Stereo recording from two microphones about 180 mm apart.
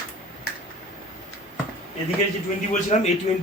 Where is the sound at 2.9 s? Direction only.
40° left (ahead or behind).